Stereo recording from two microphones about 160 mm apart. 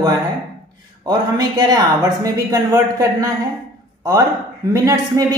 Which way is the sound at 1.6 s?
25° right (ahead or behind).